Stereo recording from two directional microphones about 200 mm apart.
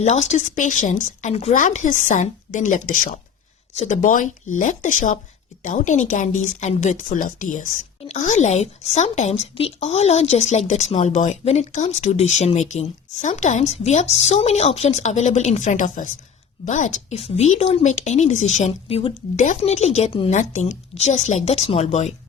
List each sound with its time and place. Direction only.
0.0 s speech: 35° left (ahead or behind)